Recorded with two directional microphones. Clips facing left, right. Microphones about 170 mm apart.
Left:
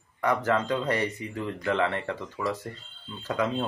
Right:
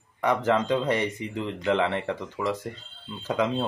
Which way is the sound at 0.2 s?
20° right (ahead or behind).